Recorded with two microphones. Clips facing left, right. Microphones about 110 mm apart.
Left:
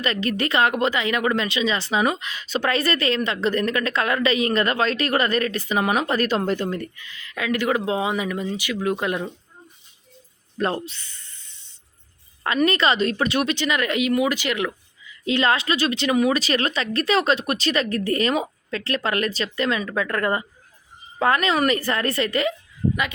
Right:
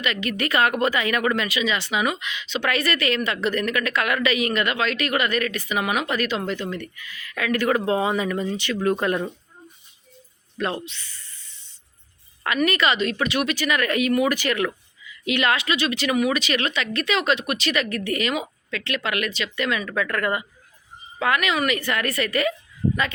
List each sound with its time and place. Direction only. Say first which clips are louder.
0.0 s speech: left 2 dB; 35° left (ahead or behind); by 9.2 s 15° left (ahead or behind)
10.6 s speech: left 3 dB; 35° left (ahead or behind)
12.4 s speech: left 2 dB; 30° left (ahead or behind)
15.0 s speech: left 2 dB; 30° left (ahead or behind)